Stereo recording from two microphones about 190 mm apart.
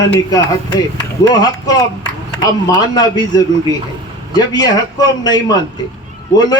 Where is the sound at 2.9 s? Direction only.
20° left (ahead or behind).